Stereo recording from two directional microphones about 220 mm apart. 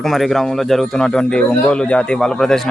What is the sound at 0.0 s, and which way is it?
A man's voice, centre (ahead or behind).